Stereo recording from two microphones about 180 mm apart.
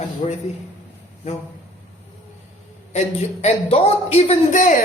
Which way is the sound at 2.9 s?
35° left (ahead or behind).